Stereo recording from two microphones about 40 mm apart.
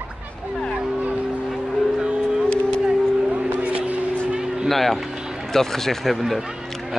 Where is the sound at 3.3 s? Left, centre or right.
Right.